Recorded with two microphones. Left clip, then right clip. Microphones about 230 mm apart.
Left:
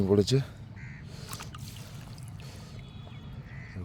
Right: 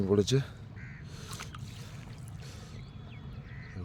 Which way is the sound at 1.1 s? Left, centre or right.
Centre.